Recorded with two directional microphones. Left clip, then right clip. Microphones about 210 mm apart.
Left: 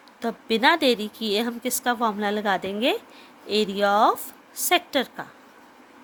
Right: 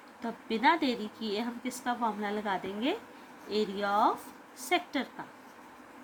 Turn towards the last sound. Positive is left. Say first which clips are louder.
# left 9 dB
turn(degrees=55)  # may be behind; listen again after turning